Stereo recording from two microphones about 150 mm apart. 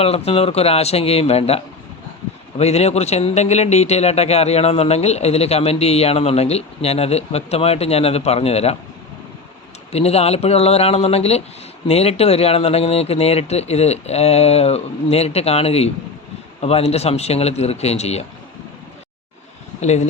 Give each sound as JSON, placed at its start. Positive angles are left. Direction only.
{"t": 0.3, "sound": "a man's voice", "side_deg": 45}
{"t": 9.9, "sound": "a man's voice", "side_deg": 45}